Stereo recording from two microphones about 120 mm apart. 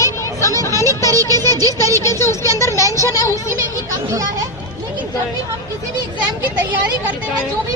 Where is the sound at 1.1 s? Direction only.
30° right (ahead or behind).